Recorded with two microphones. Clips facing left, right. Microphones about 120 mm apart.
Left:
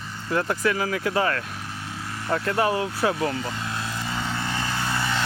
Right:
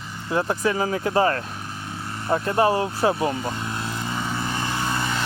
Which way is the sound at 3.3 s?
20° right (ahead or behind).